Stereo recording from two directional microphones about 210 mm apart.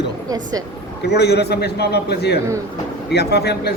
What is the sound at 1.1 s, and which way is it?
Speech, 50° left (ahead or behind).